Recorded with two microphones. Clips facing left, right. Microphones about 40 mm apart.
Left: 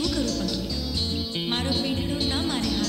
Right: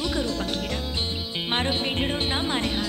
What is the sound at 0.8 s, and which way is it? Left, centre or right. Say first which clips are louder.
Music: even; right.